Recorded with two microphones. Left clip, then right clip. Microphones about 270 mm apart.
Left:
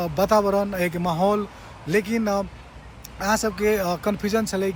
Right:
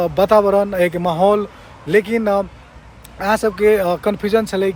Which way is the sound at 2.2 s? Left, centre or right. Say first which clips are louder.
Right 7 dB; right.